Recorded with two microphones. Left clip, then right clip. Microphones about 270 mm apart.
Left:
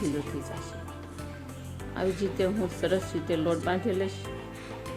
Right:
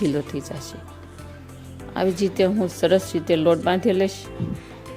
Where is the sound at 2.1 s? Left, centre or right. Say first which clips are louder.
Right 8 dB; right.